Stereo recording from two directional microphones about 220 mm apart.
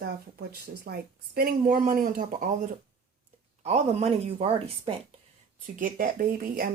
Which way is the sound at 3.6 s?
30° right (ahead or behind).